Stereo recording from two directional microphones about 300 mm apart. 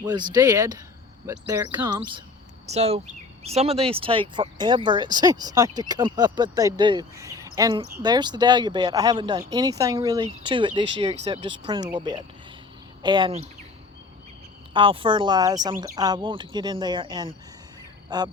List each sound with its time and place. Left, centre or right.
0.0 s speech: centre
14.7 s speech: centre